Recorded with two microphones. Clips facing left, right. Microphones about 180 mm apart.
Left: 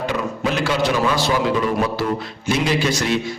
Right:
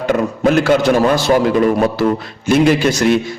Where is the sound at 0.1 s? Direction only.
50° right (ahead or behind).